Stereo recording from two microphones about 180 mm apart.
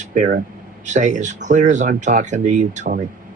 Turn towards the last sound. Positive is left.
turn(degrees=-45)  # may be behind; listen again after turning